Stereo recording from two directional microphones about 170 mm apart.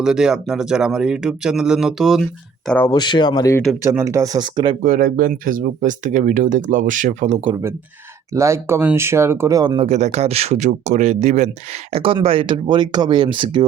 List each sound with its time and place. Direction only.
0.0 s speech: 5° right (ahead or behind)
2.6 s speech: 10° left (ahead or behind)
2.9 s speech: 25° left (ahead or behind)
3.8 s speech: 15° right (ahead or behind)
4.8 s speech: 55° right (ahead or behind)
8.4 s speech: 15° right (ahead or behind)
9.7 s speech: 40° right (ahead or behind)